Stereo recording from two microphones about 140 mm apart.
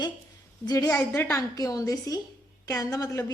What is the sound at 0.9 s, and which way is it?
A woman's voice, 15° left (ahead or behind).